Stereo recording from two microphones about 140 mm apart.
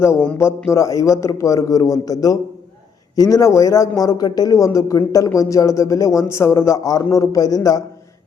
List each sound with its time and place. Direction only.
0.0 s speech: 20° left (ahead or behind)